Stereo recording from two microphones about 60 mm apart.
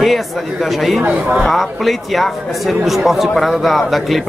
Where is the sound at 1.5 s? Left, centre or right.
Centre.